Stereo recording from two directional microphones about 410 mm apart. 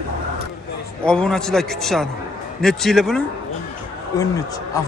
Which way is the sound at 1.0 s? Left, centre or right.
Centre.